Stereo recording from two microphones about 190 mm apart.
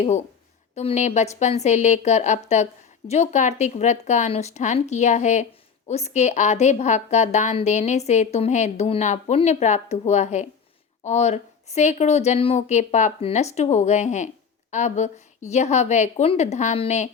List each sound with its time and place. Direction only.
0.8 s a woman's voice: 35° left (ahead or behind)